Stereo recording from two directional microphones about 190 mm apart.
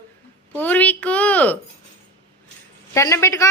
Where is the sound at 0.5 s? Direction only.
10° left (ahead or behind).